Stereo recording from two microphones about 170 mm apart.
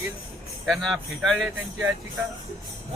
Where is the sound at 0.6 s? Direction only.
Centre (ahead or behind).